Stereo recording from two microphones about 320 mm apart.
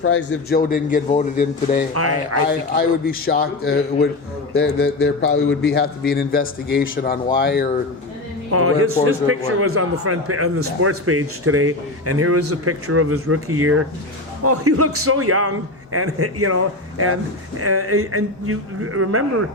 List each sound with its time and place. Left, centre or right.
0.0 s a man's voice: left
1.9 s a man's voice: right
2.5 s a man's voice: left
8.5 s a man's voice: right
17.6 s a man's voice: right